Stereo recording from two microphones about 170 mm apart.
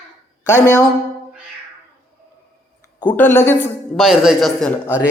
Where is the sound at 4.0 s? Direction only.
Centre (ahead or behind).